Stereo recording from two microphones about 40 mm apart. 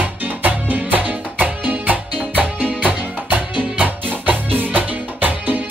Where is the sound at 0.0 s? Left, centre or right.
Right.